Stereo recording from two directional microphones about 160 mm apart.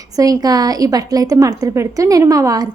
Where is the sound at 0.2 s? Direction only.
25° right (ahead or behind).